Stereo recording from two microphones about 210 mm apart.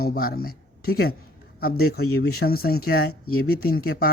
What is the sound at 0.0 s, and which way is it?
Speech, 45° left (ahead or behind).